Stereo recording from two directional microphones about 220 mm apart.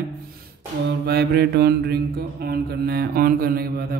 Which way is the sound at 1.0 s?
45° right (ahead or behind).